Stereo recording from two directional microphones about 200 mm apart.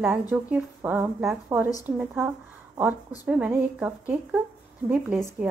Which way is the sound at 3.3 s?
10° right (ahead or behind).